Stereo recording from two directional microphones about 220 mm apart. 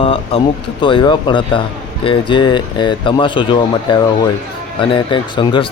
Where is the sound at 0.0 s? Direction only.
25° left (ahead or behind).